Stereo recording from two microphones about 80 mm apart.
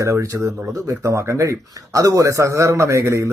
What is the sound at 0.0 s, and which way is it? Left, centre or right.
Speech, right.